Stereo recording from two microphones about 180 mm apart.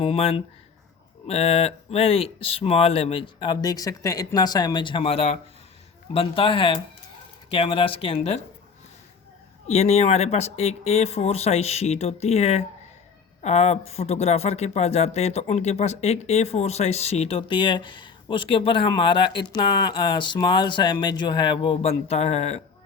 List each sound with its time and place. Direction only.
0.0 s speech: 30° left (ahead or behind)
9.6 s speech: 35° left (ahead or behind)